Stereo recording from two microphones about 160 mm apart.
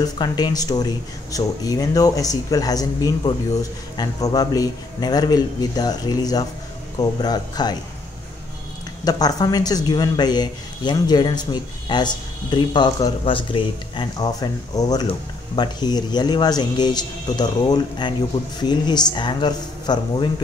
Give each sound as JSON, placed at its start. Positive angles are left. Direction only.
{"t": 0.0, "sound": "speech", "side_deg": 25}
{"t": 9.0, "sound": "speech", "side_deg": 25}